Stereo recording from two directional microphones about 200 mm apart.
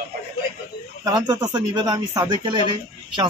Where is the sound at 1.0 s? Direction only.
20° right (ahead or behind).